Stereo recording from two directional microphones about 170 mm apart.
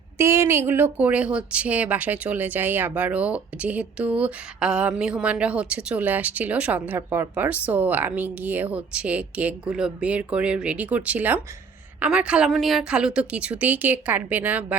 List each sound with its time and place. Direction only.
0.2 s speech: 15° right (ahead or behind)